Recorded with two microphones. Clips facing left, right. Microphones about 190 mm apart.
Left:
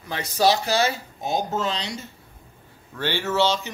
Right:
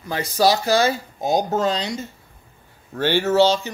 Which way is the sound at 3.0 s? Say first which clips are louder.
Right 6 dB; 40° right (ahead or behind).